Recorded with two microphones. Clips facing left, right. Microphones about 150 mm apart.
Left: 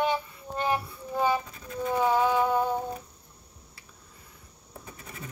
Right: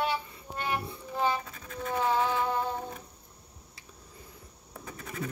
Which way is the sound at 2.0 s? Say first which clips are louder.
Left 4 dB; 15° left (ahead or behind).